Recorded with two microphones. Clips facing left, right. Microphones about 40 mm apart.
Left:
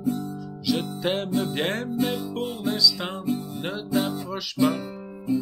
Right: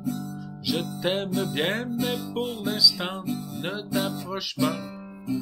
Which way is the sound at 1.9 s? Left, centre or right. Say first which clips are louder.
Left 2 dB; centre.